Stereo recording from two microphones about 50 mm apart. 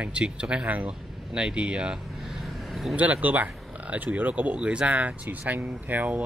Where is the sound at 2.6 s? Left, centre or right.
Centre.